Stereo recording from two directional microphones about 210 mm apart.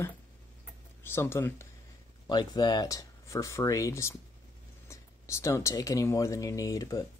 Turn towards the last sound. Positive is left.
turn(degrees=15)  # may be behind; listen again after turning